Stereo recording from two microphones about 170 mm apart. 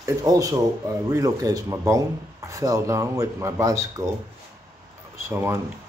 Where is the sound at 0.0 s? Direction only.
20° right (ahead or behind).